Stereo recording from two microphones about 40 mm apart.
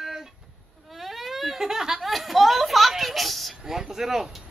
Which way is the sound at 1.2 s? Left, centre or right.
Centre.